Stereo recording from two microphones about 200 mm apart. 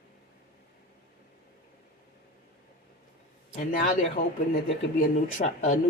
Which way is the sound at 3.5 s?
40° left (ahead or behind).